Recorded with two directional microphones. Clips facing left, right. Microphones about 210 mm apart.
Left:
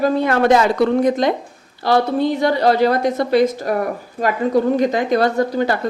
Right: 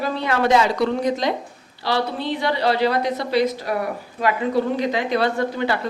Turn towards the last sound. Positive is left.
turn(degrees=40)  # may be behind; listen again after turning